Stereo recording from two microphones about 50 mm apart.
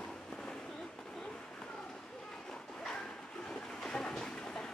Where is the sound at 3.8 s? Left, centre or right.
Centre.